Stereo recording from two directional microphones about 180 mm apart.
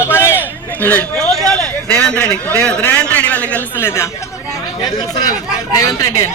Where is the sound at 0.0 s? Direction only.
15° left (ahead or behind).